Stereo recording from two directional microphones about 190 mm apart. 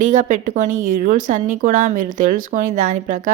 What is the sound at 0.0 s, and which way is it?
A woman's voice, 40° right (ahead or behind).